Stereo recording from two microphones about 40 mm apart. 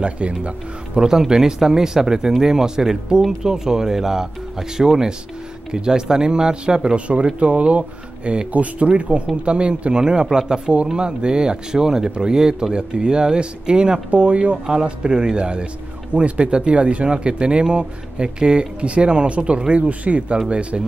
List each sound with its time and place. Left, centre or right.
0.0 s speech: right
14.1 s speech: right